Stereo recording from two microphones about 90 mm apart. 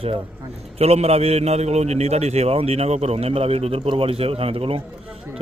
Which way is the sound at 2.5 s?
90° right.